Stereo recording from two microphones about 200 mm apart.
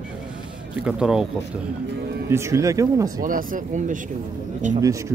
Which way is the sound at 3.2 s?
40° right (ahead or behind).